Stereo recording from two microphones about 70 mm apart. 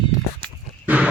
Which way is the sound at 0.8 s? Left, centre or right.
Right.